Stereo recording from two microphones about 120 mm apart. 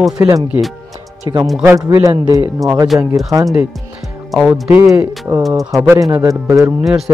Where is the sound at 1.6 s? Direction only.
25° right (ahead or behind).